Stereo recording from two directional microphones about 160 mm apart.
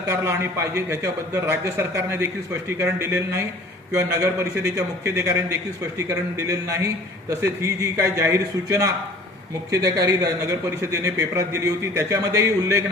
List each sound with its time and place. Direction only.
0.1 s a man's voice: 15° right (ahead or behind)